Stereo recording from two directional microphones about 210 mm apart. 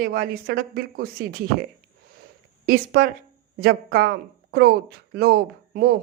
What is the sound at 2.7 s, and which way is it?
Speech, 45° right (ahead or behind).